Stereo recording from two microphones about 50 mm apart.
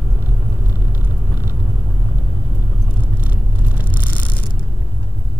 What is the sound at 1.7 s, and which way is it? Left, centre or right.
Vehicle, centre.